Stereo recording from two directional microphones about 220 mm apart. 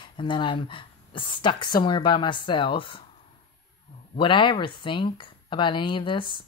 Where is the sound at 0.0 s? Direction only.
20° left (ahead or behind).